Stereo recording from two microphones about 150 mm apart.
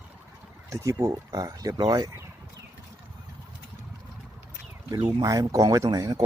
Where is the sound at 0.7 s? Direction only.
20° right (ahead or behind).